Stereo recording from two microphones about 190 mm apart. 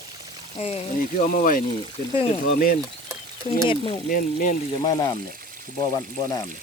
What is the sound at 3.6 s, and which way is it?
Speech, 25° left (ahead or behind).